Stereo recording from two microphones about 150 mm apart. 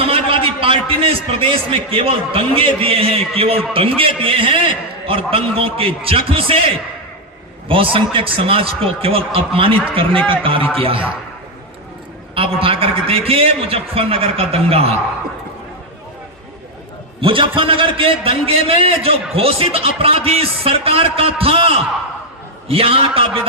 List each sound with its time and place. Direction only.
0.0 s a man's voice: 40° right (ahead or behind)
12.3 s a man's voice: 35° right (ahead or behind)
17.2 s a man's voice: 35° right (ahead or behind)